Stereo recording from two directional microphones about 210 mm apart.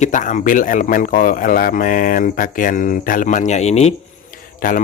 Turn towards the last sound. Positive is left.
turn(degrees=40)  # may be behind; listen again after turning